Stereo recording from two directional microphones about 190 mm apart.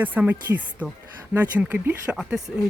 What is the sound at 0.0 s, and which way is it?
Speech, 10° right (ahead or behind).